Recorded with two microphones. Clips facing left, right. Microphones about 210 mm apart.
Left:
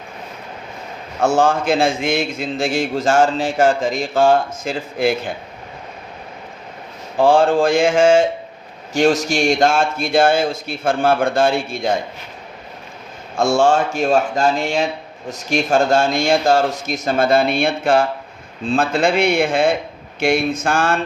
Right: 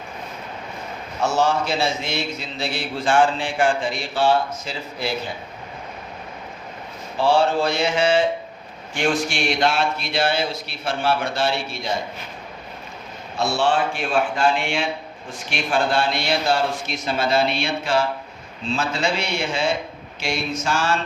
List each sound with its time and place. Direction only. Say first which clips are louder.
1.2 s a man's voice: left 5 dB; 50° left (ahead or behind)
7.2 s a man's voice: left 5 dB; 50° left (ahead or behind)
13.3 s a man's voice: left 6 dB; 45° left (ahead or behind)